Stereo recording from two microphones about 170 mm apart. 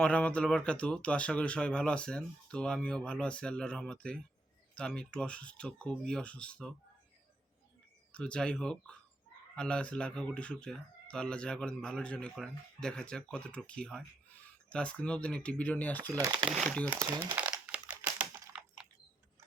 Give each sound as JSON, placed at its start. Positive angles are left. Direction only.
{"t": 0.0, "sound": "speech", "side_deg": 5}
{"t": 8.1, "sound": "speech", "side_deg": 5}
{"t": 16.0, "sound": "speech", "side_deg": -20}
{"t": 16.5, "sound": "speech", "side_deg": 0}
{"t": 16.9, "sound": "speech", "side_deg": -15}
{"t": 17.3, "sound": "crumpling", "side_deg": -5}
{"t": 17.9, "sound": "typing", "side_deg": -10}